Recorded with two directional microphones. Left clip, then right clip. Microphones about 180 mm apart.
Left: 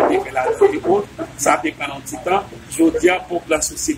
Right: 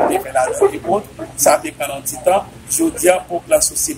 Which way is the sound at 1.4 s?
10° right (ahead or behind).